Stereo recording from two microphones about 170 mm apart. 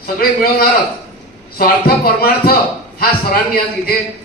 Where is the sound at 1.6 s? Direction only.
60° left (ahead or behind).